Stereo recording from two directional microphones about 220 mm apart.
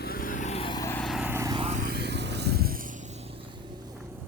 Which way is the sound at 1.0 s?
5° right (ahead or behind).